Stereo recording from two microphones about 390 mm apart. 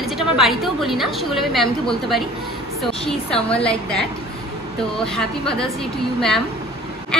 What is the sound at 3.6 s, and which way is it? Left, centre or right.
A woman's voice, centre.